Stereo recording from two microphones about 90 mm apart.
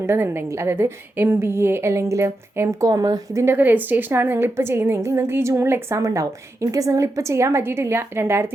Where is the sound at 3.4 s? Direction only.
20° right (ahead or behind).